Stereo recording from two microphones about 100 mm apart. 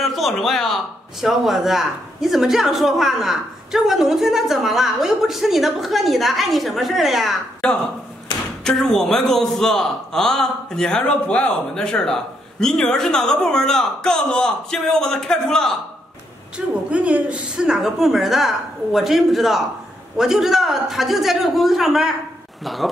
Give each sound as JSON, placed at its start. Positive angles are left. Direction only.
{"t": 0.0, "sound": "a man's voice", "side_deg": 0}
{"t": 16.5, "sound": "speech", "side_deg": -15}